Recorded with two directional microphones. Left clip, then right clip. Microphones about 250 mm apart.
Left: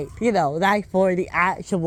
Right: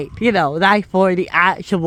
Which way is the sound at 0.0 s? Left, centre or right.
Right.